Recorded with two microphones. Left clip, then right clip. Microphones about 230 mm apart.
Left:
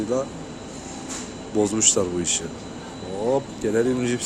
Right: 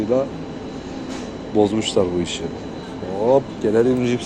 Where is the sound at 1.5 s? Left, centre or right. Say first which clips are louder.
Right 3 dB; centre.